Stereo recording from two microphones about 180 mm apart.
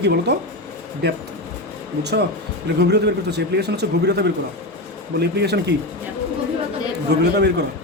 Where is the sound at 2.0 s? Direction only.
70° right (ahead or behind).